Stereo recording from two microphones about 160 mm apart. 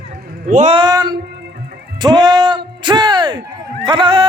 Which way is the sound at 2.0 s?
25° right (ahead or behind).